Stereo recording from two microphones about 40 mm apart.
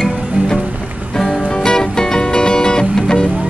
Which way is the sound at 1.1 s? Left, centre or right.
Centre.